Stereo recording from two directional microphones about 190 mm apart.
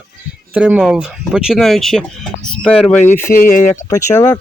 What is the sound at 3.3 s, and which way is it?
Speech, 45° left (ahead or behind).